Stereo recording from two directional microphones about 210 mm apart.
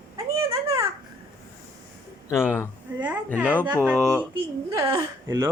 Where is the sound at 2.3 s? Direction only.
10° left (ahead or behind).